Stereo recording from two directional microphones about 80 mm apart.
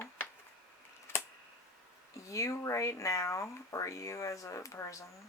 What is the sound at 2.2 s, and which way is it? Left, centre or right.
Speech, left.